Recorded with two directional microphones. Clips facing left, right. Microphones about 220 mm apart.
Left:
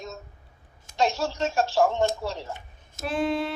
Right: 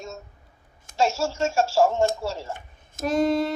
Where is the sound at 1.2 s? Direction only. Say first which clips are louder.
Right 2 dB; 5° right (ahead or behind).